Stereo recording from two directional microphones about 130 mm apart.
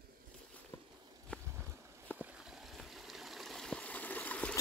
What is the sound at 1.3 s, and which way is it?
Boat, 10° left (ahead or behind).